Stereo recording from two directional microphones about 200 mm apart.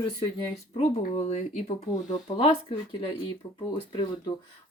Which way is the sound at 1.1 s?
35° left (ahead or behind).